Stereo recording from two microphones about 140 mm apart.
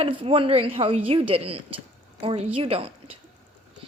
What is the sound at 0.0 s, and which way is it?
A woman's voice, 40° right (ahead or behind).